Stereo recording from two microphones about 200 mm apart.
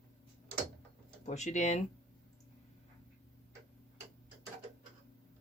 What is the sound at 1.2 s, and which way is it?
Speech, 35° left (ahead or behind).